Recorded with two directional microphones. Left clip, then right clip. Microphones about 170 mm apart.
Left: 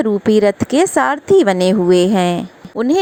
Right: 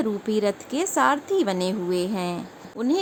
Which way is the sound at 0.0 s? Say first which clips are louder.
Left 11 dB; 40° left (ahead or behind).